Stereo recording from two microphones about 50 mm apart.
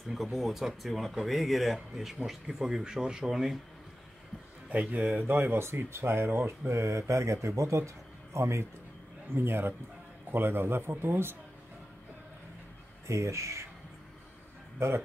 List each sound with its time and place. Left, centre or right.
0.1 s speech: centre
2.4 s speech: centre
4.6 s speech: right
5.2 s speech: right
6.7 s speech: right
9.3 s speech: right
13.0 s speech: right